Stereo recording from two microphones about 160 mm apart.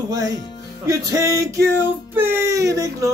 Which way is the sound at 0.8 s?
20° right (ahead or behind).